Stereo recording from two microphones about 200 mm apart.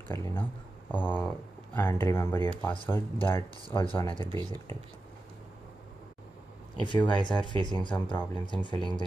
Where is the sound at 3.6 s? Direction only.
25° left (ahead or behind).